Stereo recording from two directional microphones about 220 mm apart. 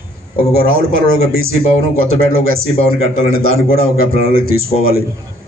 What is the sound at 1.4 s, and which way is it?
A man's voice, 70° right (ahead or behind).